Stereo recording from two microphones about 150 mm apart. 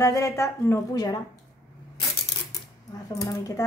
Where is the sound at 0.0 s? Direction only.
20° left (ahead or behind).